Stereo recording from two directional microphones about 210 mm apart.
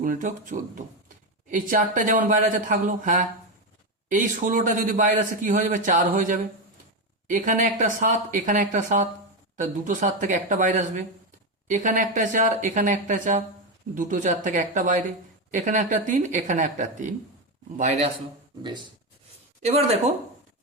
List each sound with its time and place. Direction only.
0.0 s speech: 40° right (ahead or behind)
18.6 s speech: 20° right (ahead or behind)